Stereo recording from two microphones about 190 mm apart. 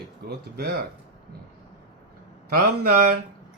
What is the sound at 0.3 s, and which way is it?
Speech, 55° right (ahead or behind).